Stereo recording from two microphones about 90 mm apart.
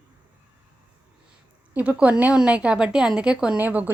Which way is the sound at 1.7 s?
15° right (ahead or behind).